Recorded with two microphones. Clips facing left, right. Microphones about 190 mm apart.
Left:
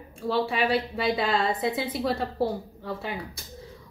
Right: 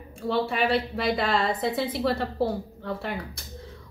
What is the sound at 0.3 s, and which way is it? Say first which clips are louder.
A woman's voice: even; centre (ahead or behind).